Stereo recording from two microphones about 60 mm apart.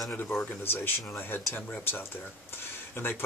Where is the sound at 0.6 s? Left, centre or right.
Left.